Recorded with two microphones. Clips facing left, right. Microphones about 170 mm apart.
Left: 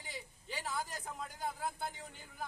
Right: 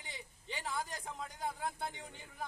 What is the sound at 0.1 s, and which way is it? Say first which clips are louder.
Speech: left 1 dB; centre (ahead or behind).